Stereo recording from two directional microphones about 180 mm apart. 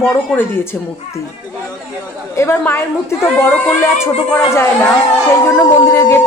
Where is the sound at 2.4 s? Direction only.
15° left (ahead or behind).